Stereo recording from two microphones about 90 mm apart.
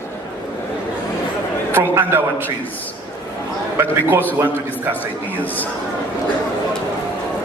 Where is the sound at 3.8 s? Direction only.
25° right (ahead or behind).